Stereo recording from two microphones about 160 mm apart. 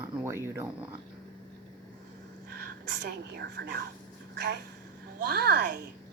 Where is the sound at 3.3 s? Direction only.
80° right.